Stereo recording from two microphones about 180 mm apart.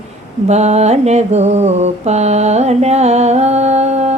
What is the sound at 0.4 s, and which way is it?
Mantra, 40° right (ahead or behind).